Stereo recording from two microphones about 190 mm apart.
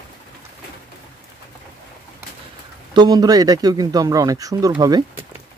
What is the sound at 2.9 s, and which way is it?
Speech, 20° right (ahead or behind).